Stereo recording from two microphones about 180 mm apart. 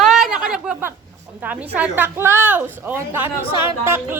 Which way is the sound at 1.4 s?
10° right (ahead or behind).